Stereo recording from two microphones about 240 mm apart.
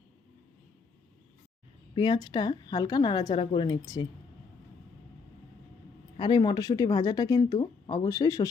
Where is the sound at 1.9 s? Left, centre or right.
Centre.